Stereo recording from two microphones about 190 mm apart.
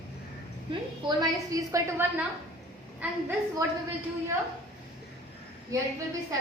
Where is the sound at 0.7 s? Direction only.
20° right (ahead or behind).